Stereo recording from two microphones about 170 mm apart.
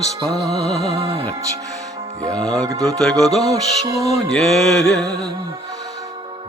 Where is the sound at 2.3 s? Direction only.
25° right (ahead or behind).